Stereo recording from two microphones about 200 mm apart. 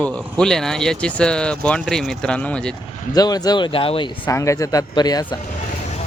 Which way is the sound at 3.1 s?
20° left (ahead or behind).